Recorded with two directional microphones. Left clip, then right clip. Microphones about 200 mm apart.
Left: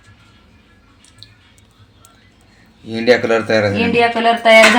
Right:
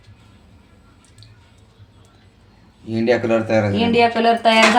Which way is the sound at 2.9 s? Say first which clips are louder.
Left 4 dB; 35° left (ahead or behind).